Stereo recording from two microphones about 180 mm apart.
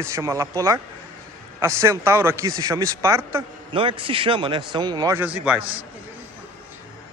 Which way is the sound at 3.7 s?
30° right (ahead or behind).